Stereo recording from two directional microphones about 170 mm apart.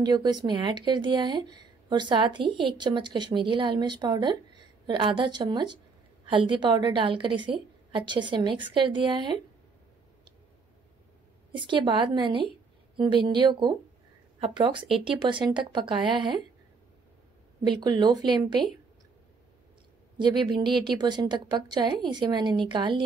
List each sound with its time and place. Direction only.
0.0 s speech: 25° right (ahead or behind)
11.5 s speech: 30° right (ahead or behind)
17.6 s speech: 25° right (ahead or behind)
20.2 s speech: 25° right (ahead or behind)